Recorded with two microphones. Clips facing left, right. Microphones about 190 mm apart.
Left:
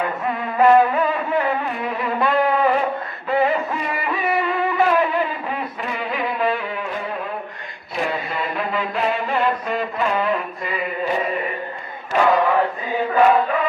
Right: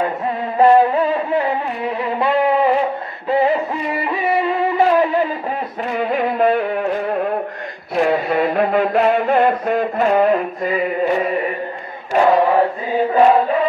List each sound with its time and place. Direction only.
0.6 s music: 30° right (ahead or behind)
2.1 s music: 25° right (ahead or behind)
5.9 s music: 50° right (ahead or behind)
7.9 s a sound: 60° right (ahead or behind); by 10.8 s 45° right (ahead or behind)
12.1 s chant: 30° right (ahead or behind)